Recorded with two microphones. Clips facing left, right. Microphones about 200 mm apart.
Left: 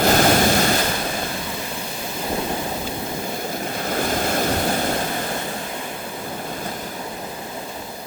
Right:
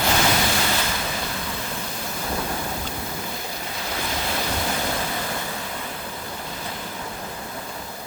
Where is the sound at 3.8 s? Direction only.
50° left (ahead or behind).